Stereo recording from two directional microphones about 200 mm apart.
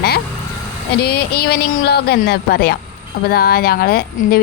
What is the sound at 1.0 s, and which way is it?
A woman's voice, 50° left (ahead or behind).